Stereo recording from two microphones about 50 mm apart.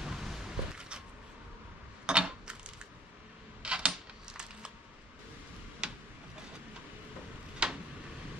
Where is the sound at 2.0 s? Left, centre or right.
Centre.